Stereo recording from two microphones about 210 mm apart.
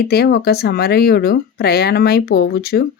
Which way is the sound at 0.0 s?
50° left (ahead or behind).